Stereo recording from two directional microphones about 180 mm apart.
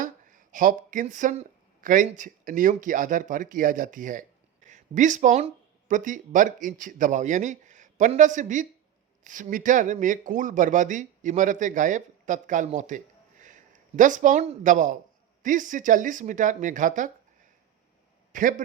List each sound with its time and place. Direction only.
0.0 s a man's voice: 45° right (ahead or behind)
18.3 s speech: 45° right (ahead or behind)